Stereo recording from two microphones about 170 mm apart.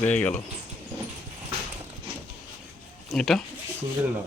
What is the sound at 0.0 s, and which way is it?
Speech, 10° left (ahead or behind).